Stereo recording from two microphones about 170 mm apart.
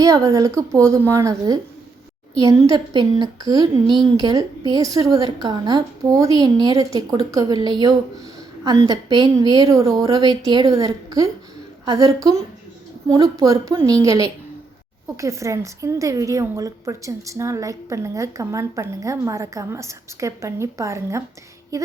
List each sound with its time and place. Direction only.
0.0 s a woman's voice: 20° right (ahead or behind)